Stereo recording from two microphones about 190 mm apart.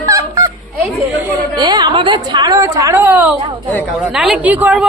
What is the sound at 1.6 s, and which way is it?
A woman's voice, 20° right (ahead or behind).